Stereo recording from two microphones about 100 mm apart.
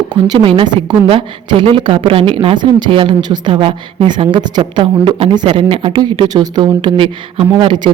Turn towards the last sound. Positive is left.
turn(degrees=-50)  # may be behind; listen again after turning